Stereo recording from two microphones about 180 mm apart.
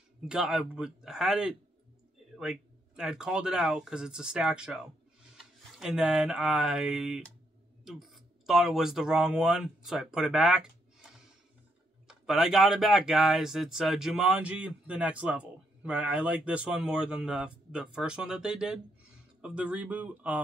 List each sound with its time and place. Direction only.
0.2 s speech: 5° right (ahead or behind)
12.1 s speech: 5° right (ahead or behind)